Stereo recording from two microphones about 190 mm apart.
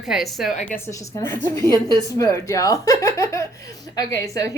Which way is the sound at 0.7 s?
15° left (ahead or behind).